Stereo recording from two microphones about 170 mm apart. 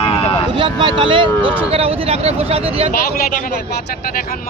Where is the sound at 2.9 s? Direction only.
55° left (ahead or behind).